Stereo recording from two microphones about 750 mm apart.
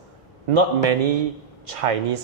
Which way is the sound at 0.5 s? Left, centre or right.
Right.